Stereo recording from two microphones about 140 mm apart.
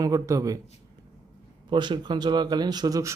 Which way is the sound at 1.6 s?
35° right (ahead or behind).